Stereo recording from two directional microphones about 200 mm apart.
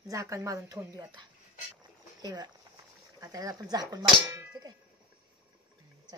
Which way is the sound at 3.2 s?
15° right (ahead or behind).